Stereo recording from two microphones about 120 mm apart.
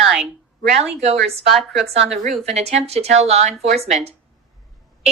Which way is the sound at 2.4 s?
65° right (ahead or behind).